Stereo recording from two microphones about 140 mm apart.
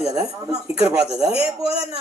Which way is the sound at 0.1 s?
25° right (ahead or behind).